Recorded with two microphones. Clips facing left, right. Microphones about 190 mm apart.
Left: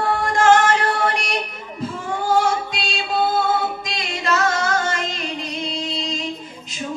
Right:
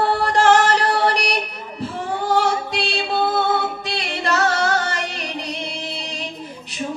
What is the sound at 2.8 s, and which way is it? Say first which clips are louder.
Music: right 1 dB; 70° right (ahead or behind).